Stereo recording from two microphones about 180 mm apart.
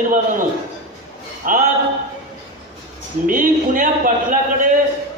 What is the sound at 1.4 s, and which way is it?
Speech, 50° right (ahead or behind).